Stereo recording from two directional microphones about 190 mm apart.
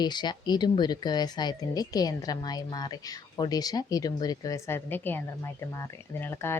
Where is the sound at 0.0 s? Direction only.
20° left (ahead or behind).